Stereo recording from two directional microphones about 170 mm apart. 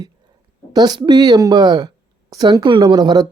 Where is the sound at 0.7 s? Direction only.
25° right (ahead or behind).